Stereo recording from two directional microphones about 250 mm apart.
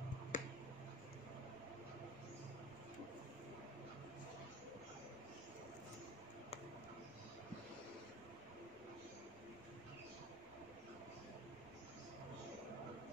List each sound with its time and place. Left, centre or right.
0.3 s finger snapping: left